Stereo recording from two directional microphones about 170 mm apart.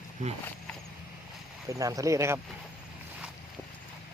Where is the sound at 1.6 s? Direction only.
20° right (ahead or behind).